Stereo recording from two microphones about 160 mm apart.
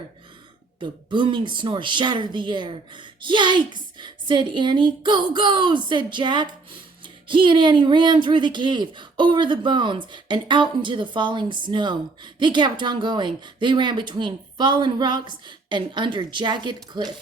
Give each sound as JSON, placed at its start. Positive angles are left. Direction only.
{"t": 0.8, "sound": "speech", "side_deg": -30}